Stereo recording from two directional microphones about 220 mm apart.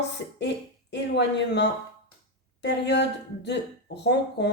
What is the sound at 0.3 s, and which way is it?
Speech, 50° left (ahead or behind).